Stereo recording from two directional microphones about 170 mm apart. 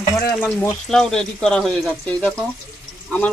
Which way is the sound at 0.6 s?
5° left (ahead or behind).